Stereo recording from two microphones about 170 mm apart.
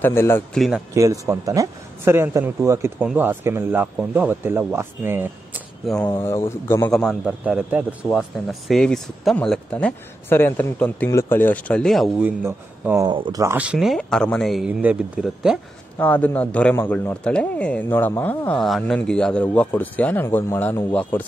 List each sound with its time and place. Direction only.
0.0 s a man's voice: 15° left (ahead or behind)
0.6 s a man's voice: 5° right (ahead or behind)
0.9 s speech: 20° right (ahead or behind)
5.8 s a man's voice: centre (ahead or behind)
13.1 s speech: 25° right (ahead or behind)
13.6 s a man's voice: 5° right (ahead or behind)
14.7 s speech: 10° right (ahead or behind)
16.0 s a man's voice: 10° left (ahead or behind)